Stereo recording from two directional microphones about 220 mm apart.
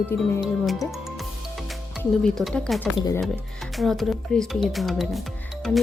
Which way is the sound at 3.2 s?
Centre (ahead or behind).